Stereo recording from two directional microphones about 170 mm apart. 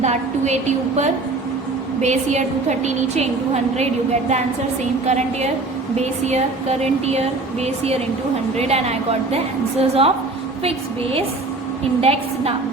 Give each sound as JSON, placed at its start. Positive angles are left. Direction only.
{"t": 0.0, "sound": "a woman's voice", "side_deg": -40}